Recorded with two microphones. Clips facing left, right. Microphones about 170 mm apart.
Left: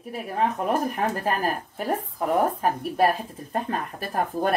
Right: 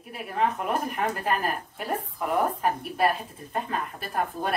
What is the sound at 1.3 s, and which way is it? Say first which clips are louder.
Speech: left 2 dB; 40° left (ahead or behind).